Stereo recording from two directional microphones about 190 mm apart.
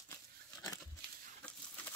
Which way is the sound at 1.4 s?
5° left (ahead or behind).